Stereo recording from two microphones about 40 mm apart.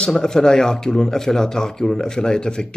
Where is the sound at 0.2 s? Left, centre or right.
Centre.